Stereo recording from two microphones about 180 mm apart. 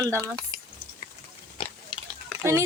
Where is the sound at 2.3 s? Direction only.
5° left (ahead or behind).